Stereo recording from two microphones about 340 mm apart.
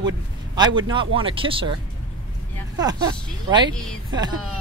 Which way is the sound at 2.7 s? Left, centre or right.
Centre.